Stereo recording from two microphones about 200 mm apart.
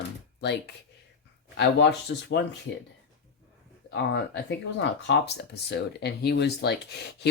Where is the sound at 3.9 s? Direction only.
60° left (ahead or behind).